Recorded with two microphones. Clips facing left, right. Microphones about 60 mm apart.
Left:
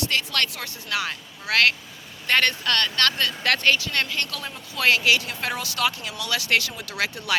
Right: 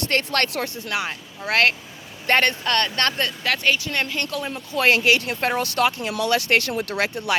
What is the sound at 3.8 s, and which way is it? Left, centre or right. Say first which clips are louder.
Speech: right 1 dB; centre.